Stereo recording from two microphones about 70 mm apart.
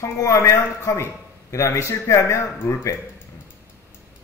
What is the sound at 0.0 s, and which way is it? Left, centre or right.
A man's voice, left.